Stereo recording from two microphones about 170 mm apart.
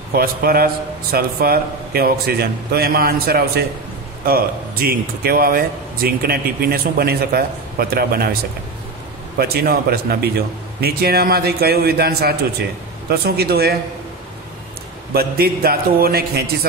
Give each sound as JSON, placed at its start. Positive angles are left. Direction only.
{"t": 0.1, "sound": "speech", "side_deg": -65}
{"t": 9.4, "sound": "a man's voice", "side_deg": -65}
{"t": 15.1, "sound": "speech", "side_deg": -65}